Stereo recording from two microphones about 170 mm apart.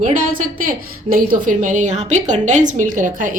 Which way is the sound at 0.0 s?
50° right (ahead or behind).